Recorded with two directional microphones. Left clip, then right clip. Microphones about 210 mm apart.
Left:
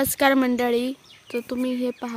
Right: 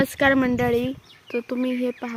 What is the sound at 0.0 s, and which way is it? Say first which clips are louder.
Speech: even; 10° left (ahead or behind).